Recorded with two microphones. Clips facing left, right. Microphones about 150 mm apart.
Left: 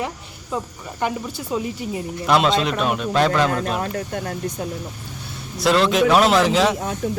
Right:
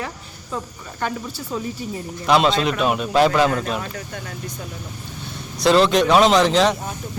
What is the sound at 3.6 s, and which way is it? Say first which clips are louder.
Speech: left 3 dB; 50° left (ahead or behind).